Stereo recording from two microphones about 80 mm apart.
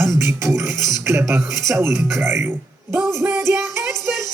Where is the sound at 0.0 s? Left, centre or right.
Right.